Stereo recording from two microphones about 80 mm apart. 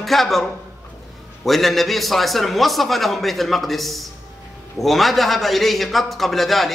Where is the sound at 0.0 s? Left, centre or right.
Centre.